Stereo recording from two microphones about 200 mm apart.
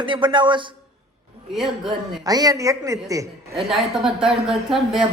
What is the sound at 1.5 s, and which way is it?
Speech, centre (ahead or behind).